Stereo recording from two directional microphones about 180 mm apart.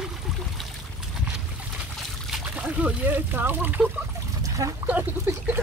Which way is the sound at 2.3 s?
10° right (ahead or behind).